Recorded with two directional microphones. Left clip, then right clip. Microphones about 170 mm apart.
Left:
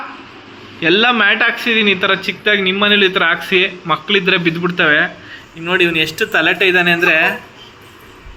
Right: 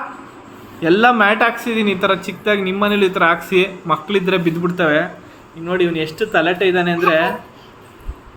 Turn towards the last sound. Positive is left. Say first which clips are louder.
# left 3 dB
turn(degrees=-15)  # may be behind; listen again after turning